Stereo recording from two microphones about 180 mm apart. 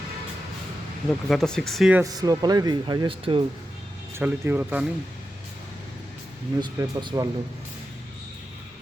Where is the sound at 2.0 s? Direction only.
20° right (ahead or behind).